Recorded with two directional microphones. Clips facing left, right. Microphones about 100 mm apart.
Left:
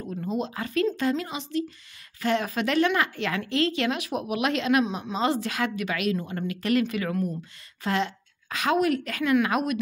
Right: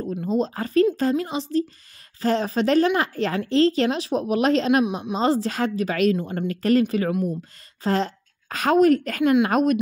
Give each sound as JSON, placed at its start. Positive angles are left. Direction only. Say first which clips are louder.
{"t": 0.1, "sound": "speech", "louder": "right 5 dB", "side_deg": -35}
{"t": 4.8, "sound": "a woman's voice", "louder": "right 4 dB", "side_deg": -15}
{"t": 5.1, "sound": "a woman's voice", "louder": "right 4 dB", "side_deg": -35}